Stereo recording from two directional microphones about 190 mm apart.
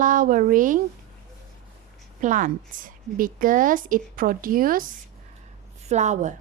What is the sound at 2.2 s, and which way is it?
A woman's voice, 45° right (ahead or behind).